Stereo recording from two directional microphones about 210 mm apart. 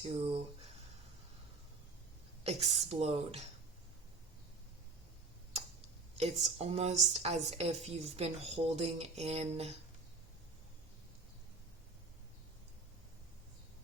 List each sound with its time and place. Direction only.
0.0 s speech: 30° right (ahead or behind)
2.4 s a woman's voice: 30° right (ahead or behind)
6.1 s a woman's voice: 30° right (ahead or behind)